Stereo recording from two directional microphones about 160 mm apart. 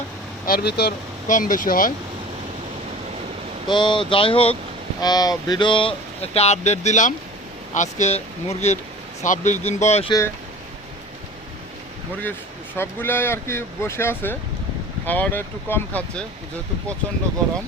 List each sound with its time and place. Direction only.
0.4 s speech: 80° left
1.3 s speech: 55° left (ahead or behind)
3.7 s speech: 30° left (ahead or behind)
4.9 s speech: 25° left (ahead or behind)
6.3 s speech: 40° left (ahead or behind)
10.1 s speech: 20° left (ahead or behind)
12.7 s speech: 15° left (ahead or behind)